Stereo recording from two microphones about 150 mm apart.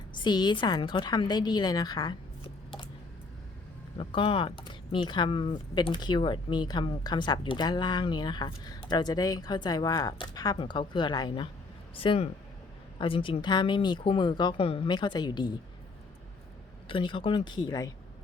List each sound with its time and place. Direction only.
0.2 s speech: 30° left (ahead or behind)
3.9 s speech: 35° left (ahead or behind)
16.9 s speech: 35° left (ahead or behind)